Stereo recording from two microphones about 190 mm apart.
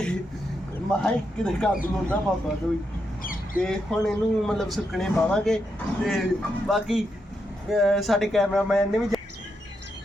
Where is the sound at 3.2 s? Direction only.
45° left (ahead or behind).